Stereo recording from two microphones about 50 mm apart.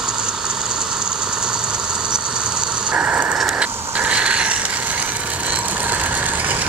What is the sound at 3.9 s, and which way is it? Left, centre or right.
Vehicle, right.